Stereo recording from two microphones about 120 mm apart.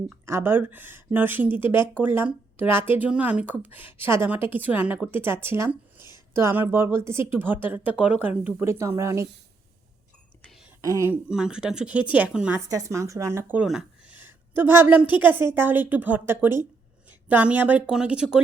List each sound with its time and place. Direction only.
0.3 s a woman's voice: 20° right (ahead or behind)
8.4 s a woman's voice: 20° right (ahead or behind)
10.4 s whispering: centre (ahead or behind)
10.8 s a woman's voice: 30° right (ahead or behind)
11.1 s speech: 5° right (ahead or behind)
12.5 s a woman's voice: 25° right (ahead or behind)
13.7 s a sound: 5° right (ahead or behind)
14.2 s speech: 15° right (ahead or behind)